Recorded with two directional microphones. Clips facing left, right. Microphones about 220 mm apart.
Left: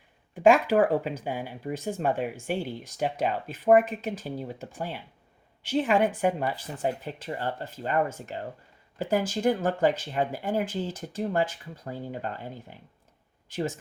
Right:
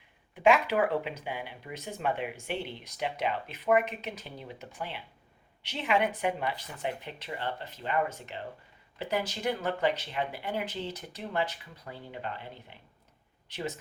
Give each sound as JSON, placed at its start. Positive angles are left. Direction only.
{"t": 0.4, "sound": "speech", "side_deg": 45}